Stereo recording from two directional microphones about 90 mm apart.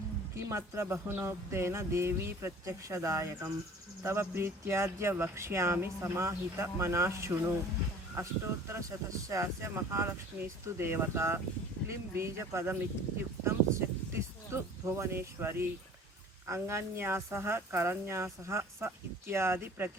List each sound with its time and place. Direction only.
0.3 s speech: 35° right (ahead or behind)
13.4 s a sound: 30° right (ahead or behind)
16.6 s speech: 30° right (ahead or behind)